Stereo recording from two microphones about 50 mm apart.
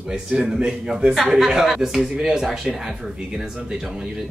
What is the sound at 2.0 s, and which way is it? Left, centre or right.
Speech, centre.